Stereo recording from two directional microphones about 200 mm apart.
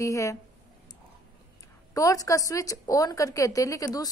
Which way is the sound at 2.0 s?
15° left (ahead or behind).